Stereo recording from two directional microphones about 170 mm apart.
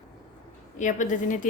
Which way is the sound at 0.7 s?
50° left (ahead or behind).